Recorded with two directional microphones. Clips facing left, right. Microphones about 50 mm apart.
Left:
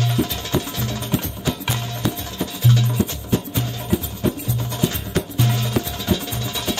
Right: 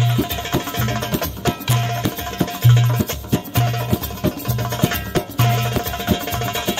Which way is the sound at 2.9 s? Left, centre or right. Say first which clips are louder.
Right 1 dB; right.